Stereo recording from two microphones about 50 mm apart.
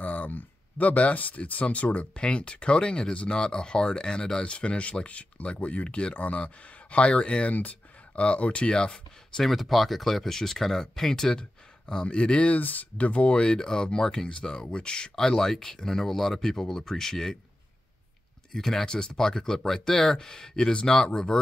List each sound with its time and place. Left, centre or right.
0.0 s speech: left
9.4 s speech: centre
18.5 s speech: centre